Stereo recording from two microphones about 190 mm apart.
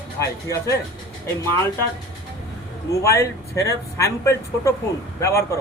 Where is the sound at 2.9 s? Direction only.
15° left (ahead or behind).